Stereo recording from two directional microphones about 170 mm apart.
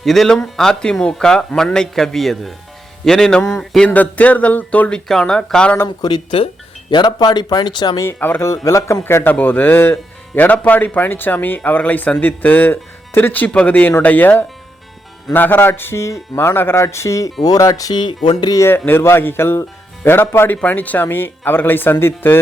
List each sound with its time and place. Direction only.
0.0 s speech: centre (ahead or behind)
6.0 s speech: 25° left (ahead or behind)